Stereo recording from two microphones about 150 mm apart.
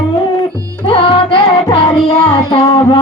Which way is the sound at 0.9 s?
35° left (ahead or behind).